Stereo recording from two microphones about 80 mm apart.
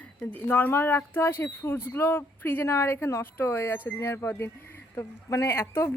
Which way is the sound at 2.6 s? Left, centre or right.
Left.